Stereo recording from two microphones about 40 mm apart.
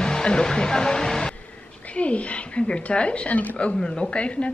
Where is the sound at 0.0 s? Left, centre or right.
Centre.